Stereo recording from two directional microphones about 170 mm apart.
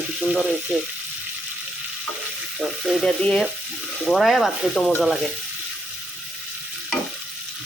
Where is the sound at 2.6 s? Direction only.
Centre (ahead or behind).